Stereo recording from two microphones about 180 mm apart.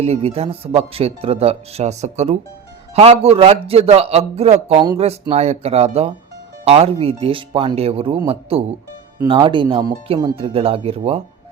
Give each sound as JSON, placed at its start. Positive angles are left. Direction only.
{"t": 0.0, "sound": "a man's voice", "side_deg": -35}